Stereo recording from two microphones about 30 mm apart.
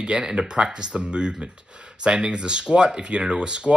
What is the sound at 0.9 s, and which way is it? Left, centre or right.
Speech, right.